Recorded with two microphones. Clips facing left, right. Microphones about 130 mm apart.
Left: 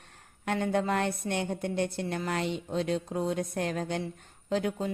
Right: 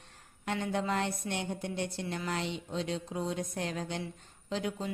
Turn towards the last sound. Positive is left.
turn(degrees=50)  # may be behind; listen again after turning